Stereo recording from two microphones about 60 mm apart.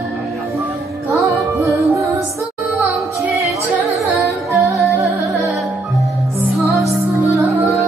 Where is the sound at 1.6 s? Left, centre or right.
Right.